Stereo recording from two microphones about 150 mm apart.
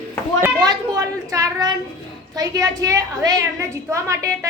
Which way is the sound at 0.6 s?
25° right (ahead or behind).